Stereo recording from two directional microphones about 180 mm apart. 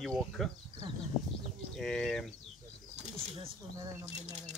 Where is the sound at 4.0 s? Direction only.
40° right (ahead or behind).